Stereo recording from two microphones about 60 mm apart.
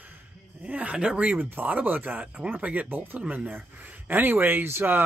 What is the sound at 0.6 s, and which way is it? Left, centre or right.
Speech, right.